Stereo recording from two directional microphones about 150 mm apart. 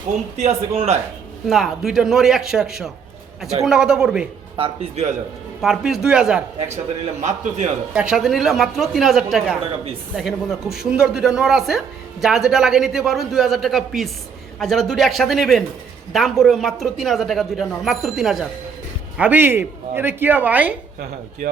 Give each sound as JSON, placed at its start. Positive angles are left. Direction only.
{"t": 0.3, "sound": "a man's voice", "side_deg": -45}
{"t": 1.5, "sound": "a man's voice", "side_deg": 0}
{"t": 4.5, "sound": "speech", "side_deg": -40}
{"t": 5.6, "sound": "a man's voice", "side_deg": -5}
{"t": 7.2, "sound": "a man's voice", "side_deg": -50}
{"t": 7.9, "sound": "a man's voice", "side_deg": -5}